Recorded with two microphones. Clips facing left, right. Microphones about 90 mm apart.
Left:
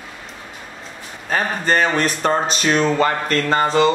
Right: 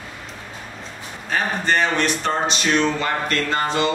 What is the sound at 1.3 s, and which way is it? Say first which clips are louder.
Speech: left 2 dB; 40° left (ahead or behind).